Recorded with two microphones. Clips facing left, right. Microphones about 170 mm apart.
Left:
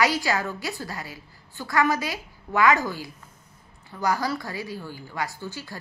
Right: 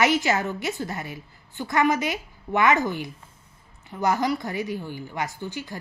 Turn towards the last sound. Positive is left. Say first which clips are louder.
# right 2 dB
turn(degrees=-20)  # may be behind; listen again after turning